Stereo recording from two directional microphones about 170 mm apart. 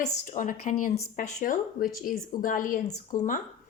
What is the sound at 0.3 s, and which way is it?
Speech, 50° left (ahead or behind).